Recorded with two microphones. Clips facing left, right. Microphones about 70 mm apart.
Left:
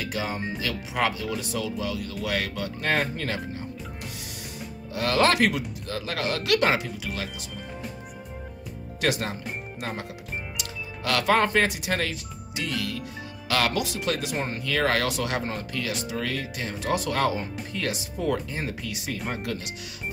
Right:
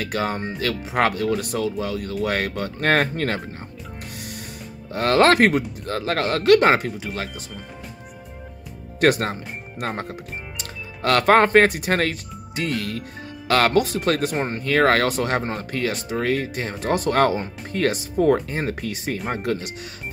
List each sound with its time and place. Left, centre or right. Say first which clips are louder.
0.0 s speech: right 5 dB; right
4.9 s speech: right 6 dB; right
9.0 s speech: right 8 dB; right